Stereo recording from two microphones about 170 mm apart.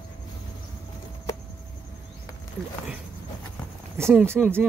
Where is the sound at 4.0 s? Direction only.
15° right (ahead or behind).